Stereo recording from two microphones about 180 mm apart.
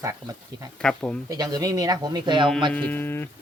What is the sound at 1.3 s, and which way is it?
Speech, 20° right (ahead or behind).